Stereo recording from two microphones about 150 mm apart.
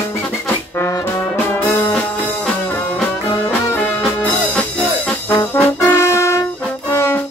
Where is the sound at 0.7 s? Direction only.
15° left (ahead or behind).